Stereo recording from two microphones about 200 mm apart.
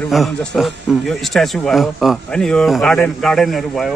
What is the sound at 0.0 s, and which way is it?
Speech, centre (ahead or behind).